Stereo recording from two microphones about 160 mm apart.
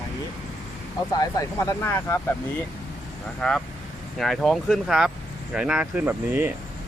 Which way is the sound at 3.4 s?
5° left (ahead or behind).